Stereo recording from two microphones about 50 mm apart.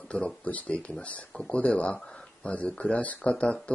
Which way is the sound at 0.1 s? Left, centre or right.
Left.